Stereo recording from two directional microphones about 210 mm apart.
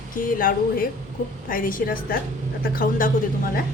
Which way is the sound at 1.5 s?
40° left (ahead or behind).